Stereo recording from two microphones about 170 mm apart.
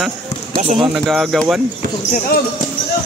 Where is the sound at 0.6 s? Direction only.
35° right (ahead or behind).